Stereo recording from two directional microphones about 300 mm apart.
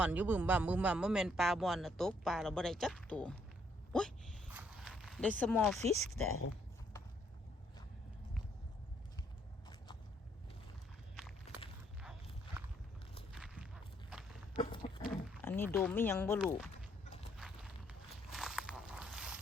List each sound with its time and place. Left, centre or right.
0.0 s speech: centre
3.9 s walk: centre
5.4 s speech: centre
11.5 s walk: left
13.3 s walk: centre
14.5 s a sound: centre
15.0 s speech: centre
17.3 s walk: centre